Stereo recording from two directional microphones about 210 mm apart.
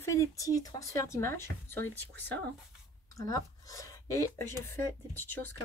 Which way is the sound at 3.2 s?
15° left (ahead or behind).